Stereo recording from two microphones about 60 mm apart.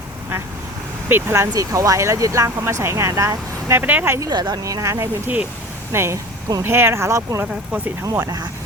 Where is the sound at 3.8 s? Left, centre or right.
Right.